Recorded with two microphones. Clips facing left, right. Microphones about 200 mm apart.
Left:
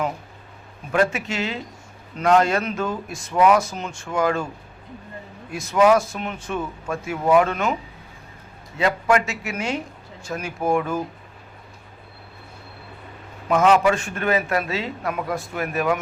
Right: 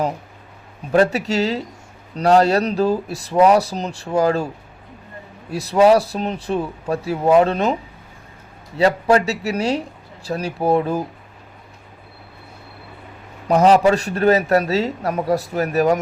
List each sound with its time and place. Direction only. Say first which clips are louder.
0.9 s a man's voice: right 5 dB; 35° right (ahead or behind)
5.5 s a man's voice: right 3 dB; 35° right (ahead or behind)
8.8 s a man's voice: right 4 dB; 35° right (ahead or behind)
13.5 s a man's voice: right 4 dB; 35° right (ahead or behind)